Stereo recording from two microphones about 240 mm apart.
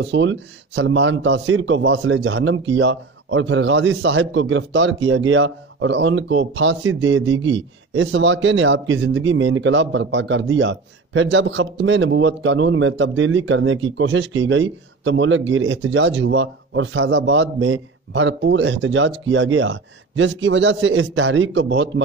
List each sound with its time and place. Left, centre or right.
0.0 s a man's voice: right